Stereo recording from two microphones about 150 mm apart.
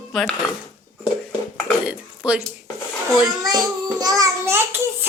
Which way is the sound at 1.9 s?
10° right (ahead or behind).